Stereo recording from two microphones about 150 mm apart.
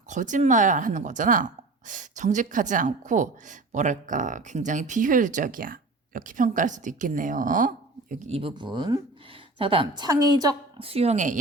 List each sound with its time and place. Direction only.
0.1 s speech: 55° right (ahead or behind)
8.3 s a woman's voice: 35° right (ahead or behind)